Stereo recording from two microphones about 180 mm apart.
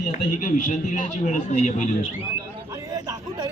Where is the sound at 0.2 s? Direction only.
45° left (ahead or behind).